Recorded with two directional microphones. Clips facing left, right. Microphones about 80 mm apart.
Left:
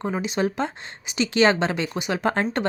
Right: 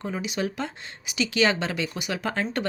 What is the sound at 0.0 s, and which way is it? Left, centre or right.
A woman's voice, left.